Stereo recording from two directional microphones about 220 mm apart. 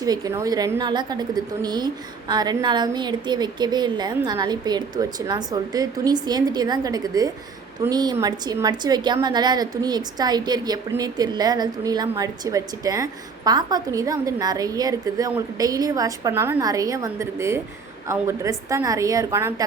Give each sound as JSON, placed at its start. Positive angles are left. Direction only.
{"t": 0.0, "sound": "a woman's voice", "side_deg": -15}